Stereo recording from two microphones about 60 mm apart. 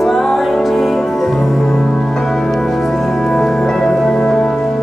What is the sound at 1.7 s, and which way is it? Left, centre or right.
Music, centre.